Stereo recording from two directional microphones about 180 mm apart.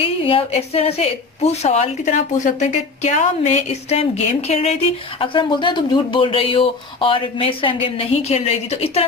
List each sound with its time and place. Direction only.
0.0 s a woman's voice: 30° left (ahead or behind)